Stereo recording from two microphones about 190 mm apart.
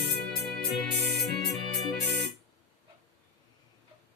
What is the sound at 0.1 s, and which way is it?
Music, 55° right (ahead or behind).